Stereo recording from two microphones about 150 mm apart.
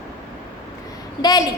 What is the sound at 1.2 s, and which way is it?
Speech, 25° left (ahead or behind).